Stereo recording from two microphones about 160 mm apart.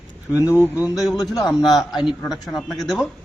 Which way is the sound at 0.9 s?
Centre (ahead or behind).